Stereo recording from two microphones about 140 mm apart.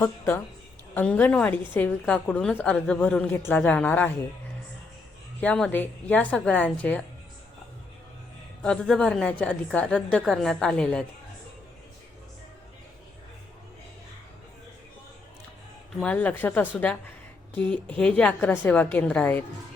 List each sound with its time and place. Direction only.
0.0 s a woman's voice: 15° left (ahead or behind)
5.4 s a woman's voice: 10° left (ahead or behind)
8.6 s a woman's voice: 5° left (ahead or behind)
16.0 s a woman's voice: 10° left (ahead or behind)